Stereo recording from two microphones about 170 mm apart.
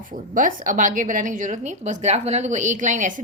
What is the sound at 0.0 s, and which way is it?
A woman's voice, 50° right (ahead or behind).